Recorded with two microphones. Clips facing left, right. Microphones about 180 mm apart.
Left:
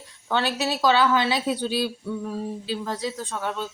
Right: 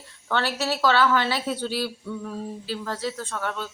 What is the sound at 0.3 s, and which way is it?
Speech, 15° left (ahead or behind).